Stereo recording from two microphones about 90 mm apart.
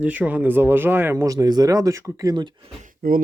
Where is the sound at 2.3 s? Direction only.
55° right (ahead or behind).